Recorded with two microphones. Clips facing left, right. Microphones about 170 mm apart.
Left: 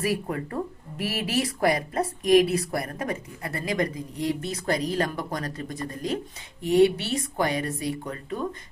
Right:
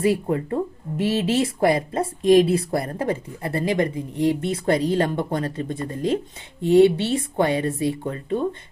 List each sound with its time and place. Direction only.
0.0 s speech: 25° right (ahead or behind)